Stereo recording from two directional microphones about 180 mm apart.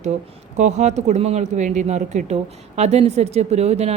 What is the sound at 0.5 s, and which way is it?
Speech, 40° right (ahead or behind).